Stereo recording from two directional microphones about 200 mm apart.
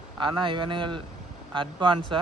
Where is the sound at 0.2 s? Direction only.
25° right (ahead or behind).